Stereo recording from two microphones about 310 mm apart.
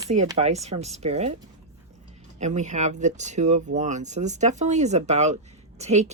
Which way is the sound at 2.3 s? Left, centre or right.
Right.